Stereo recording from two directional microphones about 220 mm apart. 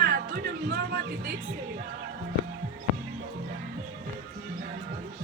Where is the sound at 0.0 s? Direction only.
45° right (ahead or behind).